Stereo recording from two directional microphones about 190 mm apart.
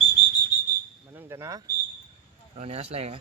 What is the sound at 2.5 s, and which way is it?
Speech, 35° right (ahead or behind).